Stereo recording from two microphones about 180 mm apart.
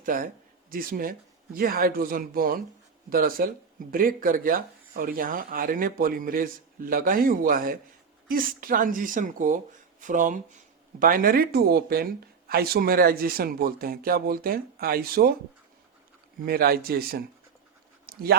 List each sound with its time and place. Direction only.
0.0 s speech: 50° right (ahead or behind)
16.5 s speech: 55° right (ahead or behind)
18.0 s pant: 55° right (ahead or behind)